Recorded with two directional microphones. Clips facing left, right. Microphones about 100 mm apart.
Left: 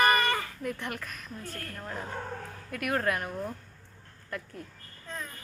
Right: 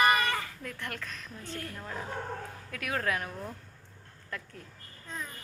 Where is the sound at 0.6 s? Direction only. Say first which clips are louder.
Left 5 dB; 15° left (ahead or behind).